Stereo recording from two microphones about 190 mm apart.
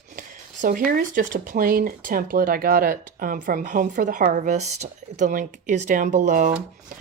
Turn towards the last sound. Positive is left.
turn(degrees=-45)  # may be behind; listen again after turning